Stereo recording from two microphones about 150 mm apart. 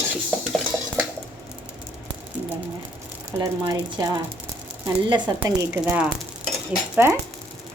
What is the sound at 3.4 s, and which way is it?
A woman's voice, 25° right (ahead or behind).